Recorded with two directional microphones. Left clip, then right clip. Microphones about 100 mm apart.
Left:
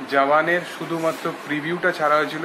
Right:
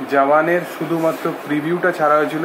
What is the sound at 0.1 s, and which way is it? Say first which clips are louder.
Speech: right 3 dB; 25° left (ahead or behind).